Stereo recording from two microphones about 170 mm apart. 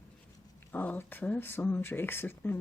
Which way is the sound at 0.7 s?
10° left (ahead or behind).